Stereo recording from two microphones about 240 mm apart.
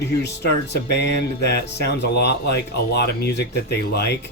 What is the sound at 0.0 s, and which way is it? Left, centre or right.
Speech, left.